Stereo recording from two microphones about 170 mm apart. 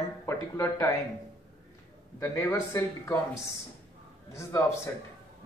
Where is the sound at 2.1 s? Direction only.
15° left (ahead or behind).